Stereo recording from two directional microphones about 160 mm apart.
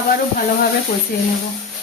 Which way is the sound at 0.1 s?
70° left (ahead or behind).